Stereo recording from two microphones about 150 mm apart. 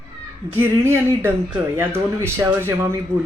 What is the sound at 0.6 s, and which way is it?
Speech, 15° right (ahead or behind).